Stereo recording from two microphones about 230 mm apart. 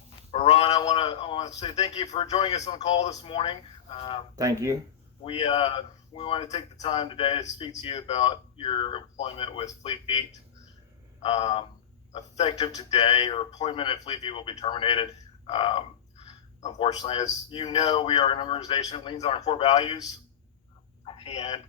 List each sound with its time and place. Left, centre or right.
0.3 s a man's voice: left
4.4 s speech: centre
5.2 s a man's voice: left
21.0 s a sound: left